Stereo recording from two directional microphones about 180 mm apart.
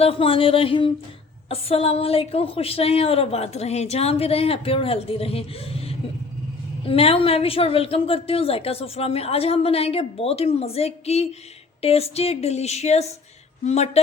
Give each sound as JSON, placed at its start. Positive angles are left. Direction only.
{"t": 0.0, "sound": "a woman's voice", "side_deg": 30}
{"t": 6.8, "sound": "a woman's voice", "side_deg": 30}